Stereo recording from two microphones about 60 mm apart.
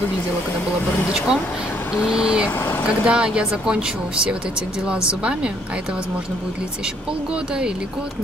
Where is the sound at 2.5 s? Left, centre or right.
Left.